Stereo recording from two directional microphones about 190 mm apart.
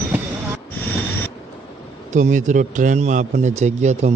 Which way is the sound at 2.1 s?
40° right (ahead or behind).